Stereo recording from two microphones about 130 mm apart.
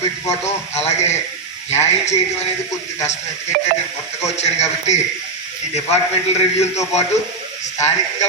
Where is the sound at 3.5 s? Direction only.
90° right.